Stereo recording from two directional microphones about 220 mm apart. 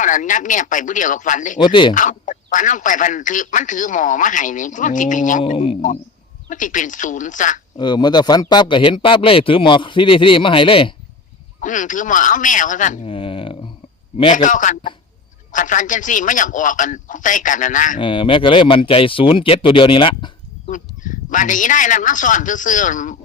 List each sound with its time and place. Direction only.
0.0 s speech: 35° left (ahead or behind)
1.5 s speech: 20° left (ahead or behind)
1.9 s speech: 35° left (ahead or behind)
5.4 s speech: 25° left (ahead or behind)
7.8 s speech: 20° left (ahead or behind)
11.6 s speech: 35° left (ahead or behind)
14.3 s speech: 35° left (ahead or behind)
18.0 s speech: 25° left (ahead or behind)
20.7 s speech: 35° left (ahead or behind)